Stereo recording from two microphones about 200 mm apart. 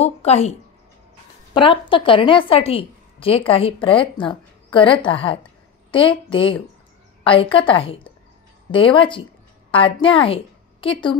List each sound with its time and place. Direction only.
0.0 s a woman's voice: 30° left (ahead or behind)